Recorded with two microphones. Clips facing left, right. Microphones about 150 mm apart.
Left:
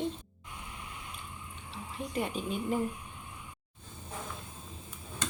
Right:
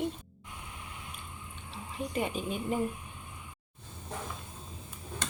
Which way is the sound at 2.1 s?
5° right (ahead or behind).